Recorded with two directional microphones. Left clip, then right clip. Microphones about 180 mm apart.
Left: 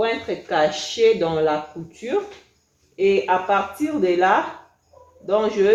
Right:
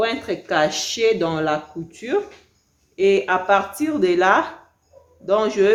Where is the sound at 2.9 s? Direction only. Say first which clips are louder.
Right 1 dB; 35° right (ahead or behind).